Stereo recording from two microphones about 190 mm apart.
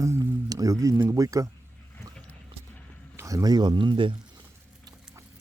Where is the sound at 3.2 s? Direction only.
15° right (ahead or behind).